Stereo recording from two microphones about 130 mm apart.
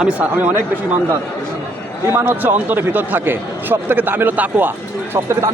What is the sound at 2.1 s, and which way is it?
Speech, 15° right (ahead or behind).